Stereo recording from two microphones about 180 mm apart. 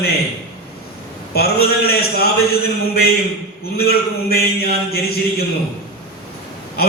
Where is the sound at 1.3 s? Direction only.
60° left (ahead or behind).